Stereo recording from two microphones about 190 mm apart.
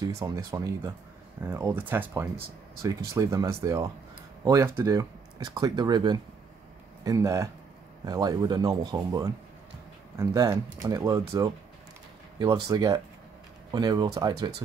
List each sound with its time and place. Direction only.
0.0 s speech: 15° right (ahead or behind)